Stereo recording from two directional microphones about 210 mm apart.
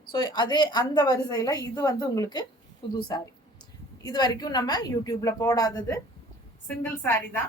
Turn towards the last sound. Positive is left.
turn(degrees=10)  # may be behind; listen again after turning